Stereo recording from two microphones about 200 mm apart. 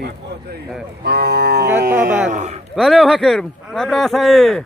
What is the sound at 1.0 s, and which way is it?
Speech, 55° right (ahead or behind).